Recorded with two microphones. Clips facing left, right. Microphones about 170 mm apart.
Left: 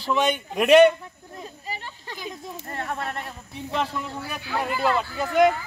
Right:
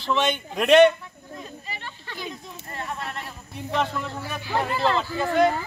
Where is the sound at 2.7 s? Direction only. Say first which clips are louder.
Left 2 dB; 50° left (ahead or behind).